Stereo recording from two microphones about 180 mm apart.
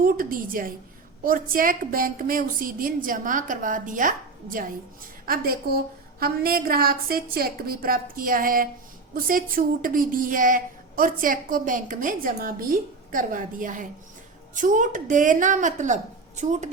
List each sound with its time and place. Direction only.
0.0 s a woman's voice: 50° right (ahead or behind)